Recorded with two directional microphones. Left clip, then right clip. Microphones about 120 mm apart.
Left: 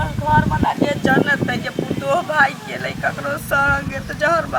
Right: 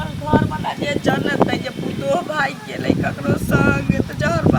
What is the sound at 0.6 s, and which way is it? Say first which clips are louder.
Speech: left 2 dB; centre (ahead or behind).